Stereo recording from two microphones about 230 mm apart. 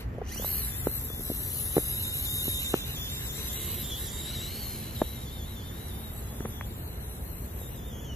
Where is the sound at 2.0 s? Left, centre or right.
Centre.